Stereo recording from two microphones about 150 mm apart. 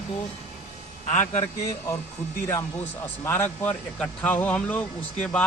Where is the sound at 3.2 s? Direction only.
15° left (ahead or behind).